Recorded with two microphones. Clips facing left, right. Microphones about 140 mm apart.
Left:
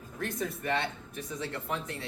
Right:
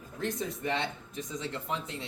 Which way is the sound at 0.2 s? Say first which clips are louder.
Right 1 dB; 20° right (ahead or behind).